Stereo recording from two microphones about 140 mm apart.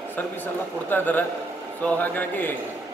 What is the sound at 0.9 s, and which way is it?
A man's voice, 10° left (ahead or behind).